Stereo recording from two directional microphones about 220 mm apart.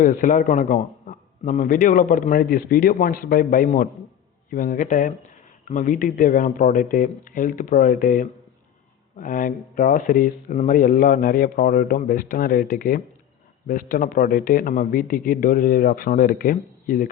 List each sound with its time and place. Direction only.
0.0 s a man's voice: 35° left (ahead or behind)